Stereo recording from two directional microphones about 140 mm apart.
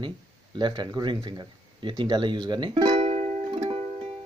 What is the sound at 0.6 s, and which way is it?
Speech, 35° right (ahead or behind).